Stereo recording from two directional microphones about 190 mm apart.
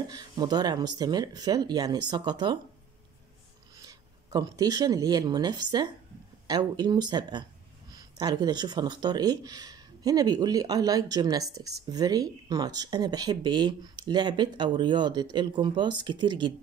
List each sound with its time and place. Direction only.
0.1 s speech: 20° right (ahead or behind)
3.8 s speech: 20° right (ahead or behind)